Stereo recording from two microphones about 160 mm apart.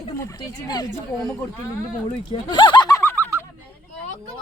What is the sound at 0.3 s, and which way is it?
Speech, 25° left (ahead or behind).